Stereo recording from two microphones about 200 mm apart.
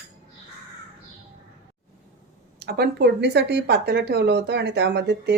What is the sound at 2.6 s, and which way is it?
Speech, 50° right (ahead or behind).